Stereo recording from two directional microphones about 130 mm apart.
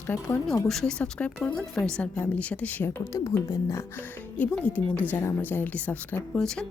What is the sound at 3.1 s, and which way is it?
Speech, 20° left (ahead or behind).